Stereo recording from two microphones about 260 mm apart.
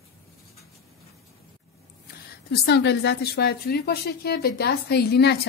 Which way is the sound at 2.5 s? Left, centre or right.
Left.